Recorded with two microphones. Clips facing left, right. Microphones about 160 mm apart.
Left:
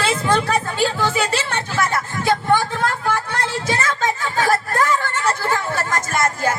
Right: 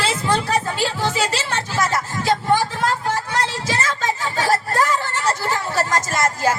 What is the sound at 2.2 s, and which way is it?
Speech, 55° left (ahead or behind).